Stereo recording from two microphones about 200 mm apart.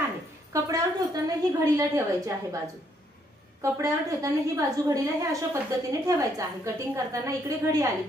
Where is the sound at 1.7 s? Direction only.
15° right (ahead or behind).